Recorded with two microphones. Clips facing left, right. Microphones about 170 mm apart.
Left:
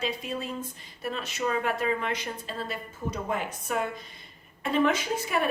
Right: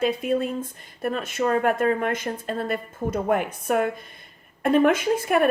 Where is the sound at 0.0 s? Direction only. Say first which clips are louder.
Right 9 dB; 55° right (ahead or behind).